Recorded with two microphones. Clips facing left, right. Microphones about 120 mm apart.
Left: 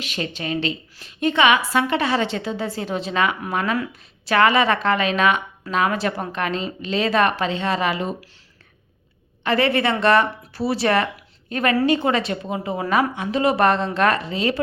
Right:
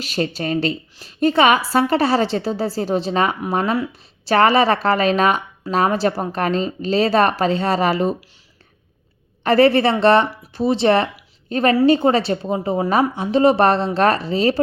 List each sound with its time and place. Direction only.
0.0 s a woman's voice: 35° right (ahead or behind)
9.4 s a woman's voice: 40° right (ahead or behind)